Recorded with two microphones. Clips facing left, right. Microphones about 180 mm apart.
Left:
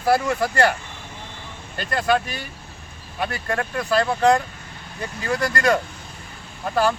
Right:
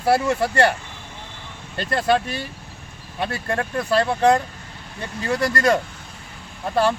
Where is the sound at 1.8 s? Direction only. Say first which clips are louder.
Right 1 dB; 30° right (ahead or behind).